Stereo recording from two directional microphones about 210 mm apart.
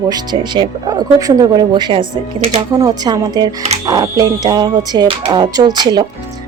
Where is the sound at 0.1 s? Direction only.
20° right (ahead or behind).